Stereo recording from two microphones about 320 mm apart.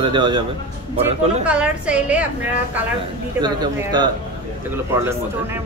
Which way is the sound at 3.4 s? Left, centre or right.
Centre.